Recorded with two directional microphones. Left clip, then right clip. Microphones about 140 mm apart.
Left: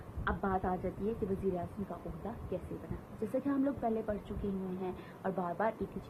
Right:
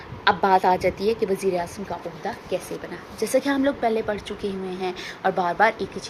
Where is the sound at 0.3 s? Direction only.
45° right (ahead or behind).